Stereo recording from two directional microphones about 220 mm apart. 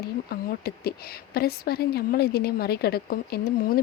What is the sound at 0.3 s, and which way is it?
A woman's voice, 45° left (ahead or behind).